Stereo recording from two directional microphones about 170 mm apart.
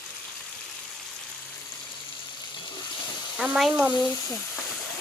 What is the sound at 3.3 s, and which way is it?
Speech, 5° right (ahead or behind).